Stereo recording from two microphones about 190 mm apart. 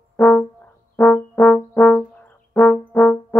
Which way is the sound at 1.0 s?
10° left (ahead or behind).